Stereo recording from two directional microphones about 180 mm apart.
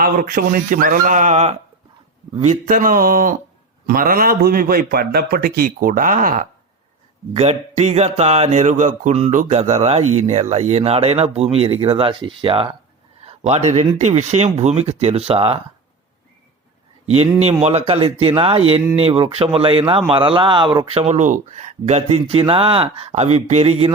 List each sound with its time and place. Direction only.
0.0 s a man's voice: 50° right (ahead or behind); by 15.5 s 30° right (ahead or behind)
17.6 s speech: 35° right (ahead or behind)